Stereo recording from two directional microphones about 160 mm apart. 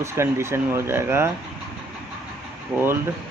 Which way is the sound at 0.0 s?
15° right (ahead or behind).